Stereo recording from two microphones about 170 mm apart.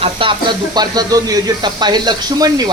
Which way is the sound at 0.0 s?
30° right (ahead or behind).